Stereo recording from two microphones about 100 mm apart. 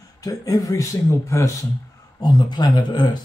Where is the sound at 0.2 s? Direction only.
35° left (ahead or behind).